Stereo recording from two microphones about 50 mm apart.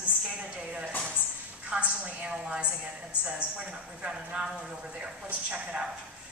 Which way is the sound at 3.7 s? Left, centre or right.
Right.